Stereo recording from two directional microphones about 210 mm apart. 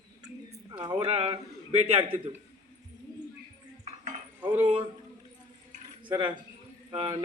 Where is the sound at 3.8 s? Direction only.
35° right (ahead or behind).